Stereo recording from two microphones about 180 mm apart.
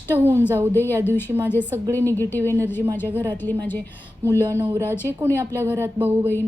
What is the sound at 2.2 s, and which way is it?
Speech, 10° left (ahead or behind).